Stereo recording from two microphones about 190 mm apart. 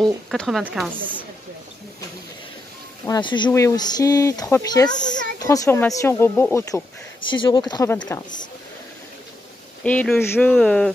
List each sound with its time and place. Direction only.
0.3 s speech: centre (ahead or behind)
3.1 s speech: 25° left (ahead or behind)
9.8 s speech: 10° left (ahead or behind)